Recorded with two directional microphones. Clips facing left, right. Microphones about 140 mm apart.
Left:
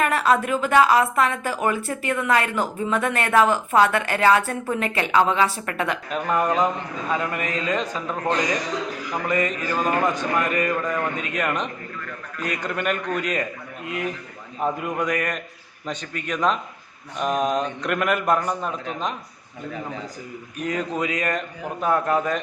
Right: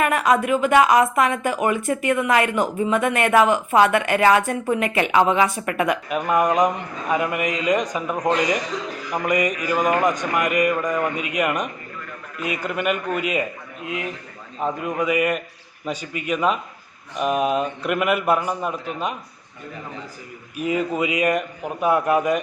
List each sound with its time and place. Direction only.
0.0 s a woman's voice: 15° right (ahead or behind)
14.6 s a man's voice: centre (ahead or behind)
20.6 s a woman's voice: 5° right (ahead or behind)